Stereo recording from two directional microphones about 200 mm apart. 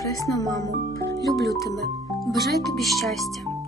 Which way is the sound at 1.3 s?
Centre (ahead or behind).